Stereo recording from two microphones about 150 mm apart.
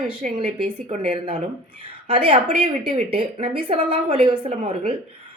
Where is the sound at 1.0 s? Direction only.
35° right (ahead or behind).